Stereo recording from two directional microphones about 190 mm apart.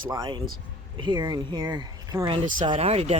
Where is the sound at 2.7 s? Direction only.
30° right (ahead or behind).